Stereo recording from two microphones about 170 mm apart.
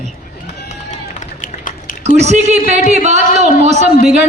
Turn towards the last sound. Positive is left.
turn(degrees=-40)  # may be behind; listen again after turning